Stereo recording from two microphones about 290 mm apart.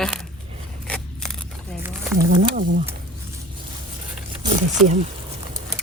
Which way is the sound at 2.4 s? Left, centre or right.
Right.